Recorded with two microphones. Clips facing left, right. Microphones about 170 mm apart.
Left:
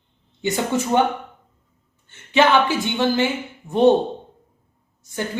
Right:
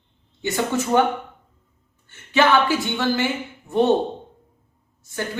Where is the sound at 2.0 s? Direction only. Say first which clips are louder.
Left 1 dB; 20° left (ahead or behind).